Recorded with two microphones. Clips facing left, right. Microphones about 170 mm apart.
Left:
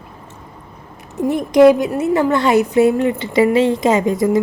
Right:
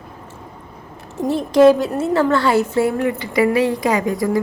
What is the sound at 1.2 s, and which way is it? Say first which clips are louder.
A woman's voice: left 2 dB; 15° left (ahead or behind).